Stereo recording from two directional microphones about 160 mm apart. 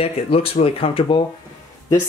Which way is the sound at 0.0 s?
35° left (ahead or behind).